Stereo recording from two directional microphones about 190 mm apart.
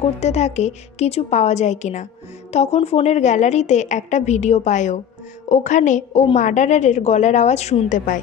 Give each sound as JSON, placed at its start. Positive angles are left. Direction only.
{"t": 0.2, "sound": "a woman's voice", "side_deg": 35}